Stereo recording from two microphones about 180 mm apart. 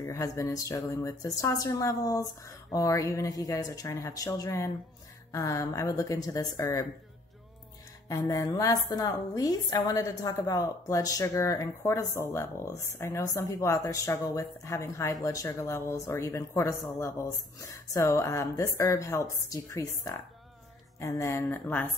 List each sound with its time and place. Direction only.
0.0 s a woman's voice: 15° left (ahead or behind)
8.1 s a woman's voice: 20° left (ahead or behind)